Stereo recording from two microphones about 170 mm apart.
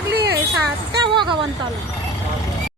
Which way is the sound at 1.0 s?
30° right (ahead or behind).